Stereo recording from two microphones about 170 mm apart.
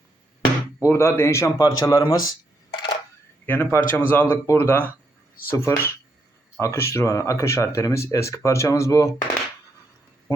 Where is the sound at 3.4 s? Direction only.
15° left (ahead or behind).